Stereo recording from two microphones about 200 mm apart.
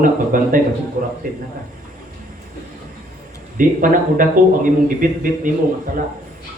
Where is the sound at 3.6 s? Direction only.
45° right (ahead or behind).